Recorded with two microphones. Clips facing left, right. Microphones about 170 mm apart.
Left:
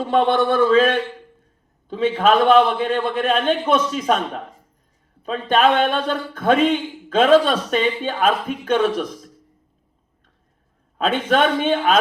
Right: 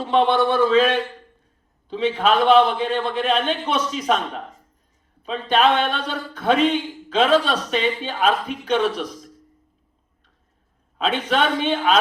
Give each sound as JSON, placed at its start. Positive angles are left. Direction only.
{"t": 0.1, "sound": "a man's voice", "side_deg": 50}
{"t": 5.2, "sound": "a man's voice", "side_deg": 50}
{"t": 10.9, "sound": "a man's voice", "side_deg": 50}